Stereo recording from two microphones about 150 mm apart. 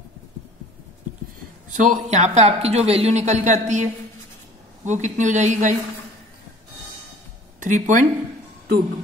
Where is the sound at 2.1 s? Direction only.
45° right (ahead or behind).